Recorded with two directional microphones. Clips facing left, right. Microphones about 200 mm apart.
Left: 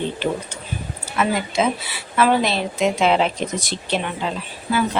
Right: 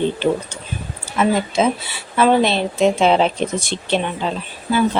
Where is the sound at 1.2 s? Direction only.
25° right (ahead or behind).